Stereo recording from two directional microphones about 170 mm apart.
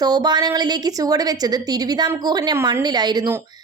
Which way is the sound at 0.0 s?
25° right (ahead or behind).